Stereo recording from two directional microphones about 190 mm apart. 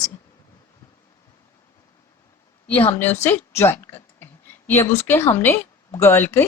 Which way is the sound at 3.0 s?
10° left (ahead or behind).